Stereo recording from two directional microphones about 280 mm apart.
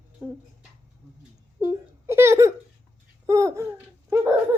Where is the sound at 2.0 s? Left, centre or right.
Centre.